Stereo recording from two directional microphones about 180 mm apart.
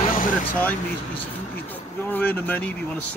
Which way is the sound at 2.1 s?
10° left (ahead or behind).